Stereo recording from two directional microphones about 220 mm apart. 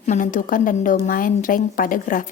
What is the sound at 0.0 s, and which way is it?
A woman's voice, 35° left (ahead or behind).